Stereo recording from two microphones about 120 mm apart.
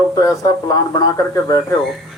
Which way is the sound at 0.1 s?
30° left (ahead or behind).